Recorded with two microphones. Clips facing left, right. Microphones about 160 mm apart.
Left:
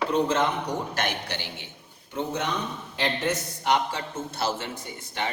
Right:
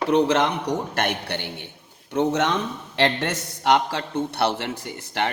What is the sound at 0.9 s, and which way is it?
A man's voice, 60° right (ahead or behind).